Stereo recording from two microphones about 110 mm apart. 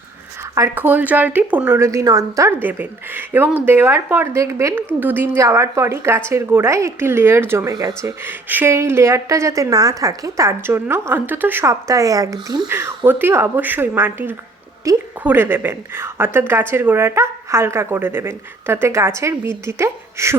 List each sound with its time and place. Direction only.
0.7 s a woman's voice: 15° right (ahead or behind); by 2.5 s 30° right (ahead or behind)
2.5 s a woman's voice: 15° right (ahead or behind)
7.7 s speech: 35° right (ahead or behind)
8.2 s speech: 20° right (ahead or behind)
12.6 s speech: 20° right (ahead or behind)
15.2 s speech: 20° right (ahead or behind)